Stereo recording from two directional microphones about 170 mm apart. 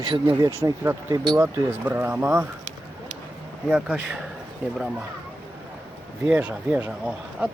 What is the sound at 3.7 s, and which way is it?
Speech, 5° right (ahead or behind).